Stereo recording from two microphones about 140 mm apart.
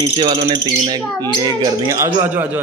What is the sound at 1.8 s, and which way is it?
Speech, 20° right (ahead or behind).